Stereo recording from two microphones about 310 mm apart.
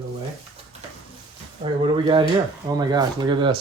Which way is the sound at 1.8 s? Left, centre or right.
Centre.